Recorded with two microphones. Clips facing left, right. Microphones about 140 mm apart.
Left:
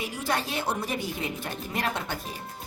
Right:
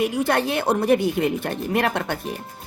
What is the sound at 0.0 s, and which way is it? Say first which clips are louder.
Speech: right 9 dB; 60° right (ahead or behind).